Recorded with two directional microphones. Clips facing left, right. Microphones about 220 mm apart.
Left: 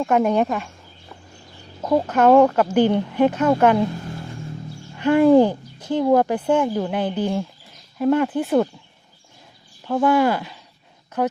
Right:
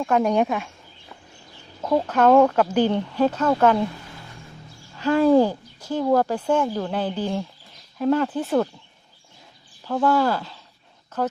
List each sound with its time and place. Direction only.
0.0 s speech: 5° left (ahead or behind)
1.8 s speech: 10° left (ahead or behind)
5.0 s speech: 15° left (ahead or behind)
9.8 s speech: 10° left (ahead or behind)